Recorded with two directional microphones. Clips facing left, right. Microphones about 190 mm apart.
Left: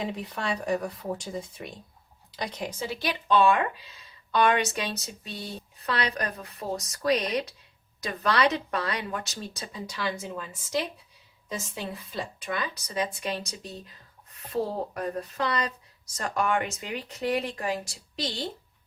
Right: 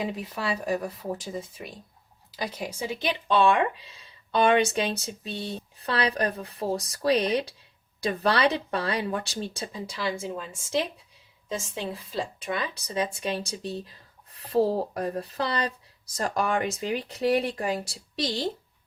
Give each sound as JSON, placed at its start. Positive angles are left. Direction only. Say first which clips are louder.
{"t": 0.0, "sound": "a woman's voice", "louder": "right 1 dB", "side_deg": -5}
{"t": 3.3, "sound": "a woman's voice", "louder": "even", "side_deg": -30}